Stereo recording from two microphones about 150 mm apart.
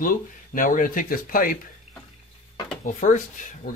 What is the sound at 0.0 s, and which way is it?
Speech, 65° left (ahead or behind).